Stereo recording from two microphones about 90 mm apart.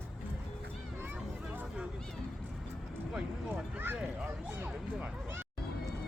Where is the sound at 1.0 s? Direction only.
20° right (ahead or behind).